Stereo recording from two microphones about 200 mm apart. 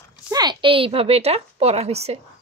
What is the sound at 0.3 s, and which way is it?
A woman's voice, 20° right (ahead or behind).